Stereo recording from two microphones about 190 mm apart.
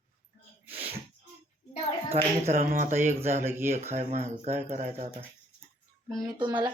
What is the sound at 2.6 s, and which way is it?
Speech, 45° right (ahead or behind).